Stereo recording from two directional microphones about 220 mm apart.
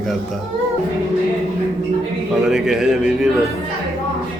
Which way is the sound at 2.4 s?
5° right (ahead or behind).